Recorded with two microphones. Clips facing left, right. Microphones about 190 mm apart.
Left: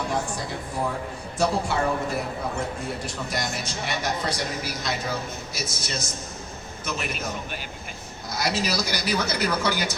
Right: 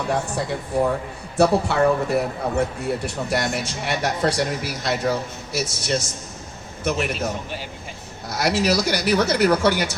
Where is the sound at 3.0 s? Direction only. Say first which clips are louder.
Right 6 dB; 65° right (ahead or behind).